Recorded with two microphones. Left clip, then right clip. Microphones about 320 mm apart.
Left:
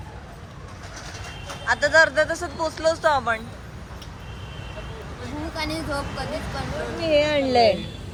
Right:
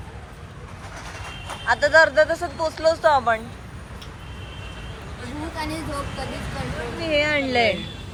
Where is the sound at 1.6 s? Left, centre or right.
Centre.